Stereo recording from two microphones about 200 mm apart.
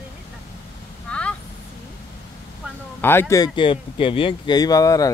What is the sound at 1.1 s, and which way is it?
Speech, 5° left (ahead or behind).